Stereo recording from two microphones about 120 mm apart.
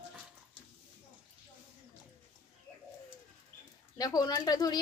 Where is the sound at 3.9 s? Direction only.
30° left (ahead or behind).